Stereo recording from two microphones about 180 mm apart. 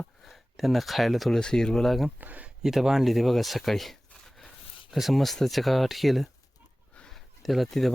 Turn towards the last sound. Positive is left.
turn(degrees=0)  # may be behind; listen again after turning